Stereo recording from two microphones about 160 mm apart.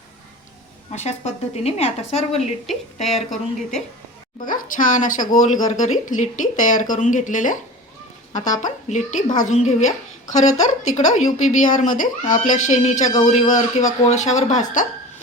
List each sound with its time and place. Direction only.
0.9 s a woman's voice: 45° left (ahead or behind)
2.6 s speech: centre (ahead or behind)
4.4 s speech: 55° left (ahead or behind)